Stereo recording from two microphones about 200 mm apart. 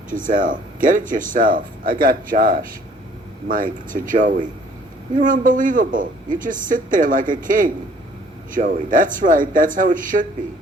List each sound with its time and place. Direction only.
0.1 s a man's voice: 40° right (ahead or behind)